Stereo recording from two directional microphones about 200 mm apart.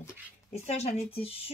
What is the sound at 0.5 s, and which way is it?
Speech, 35° left (ahead or behind).